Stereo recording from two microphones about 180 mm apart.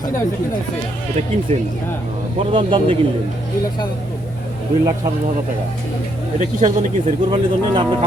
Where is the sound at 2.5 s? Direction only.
30° right (ahead or behind).